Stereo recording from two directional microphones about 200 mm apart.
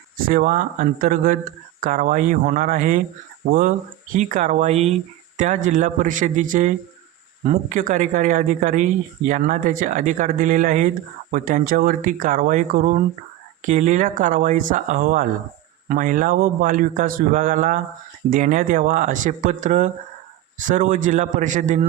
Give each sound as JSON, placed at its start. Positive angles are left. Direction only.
{"t": 0.3, "sound": "speech", "side_deg": -45}
{"t": 4.1, "sound": "speech", "side_deg": -40}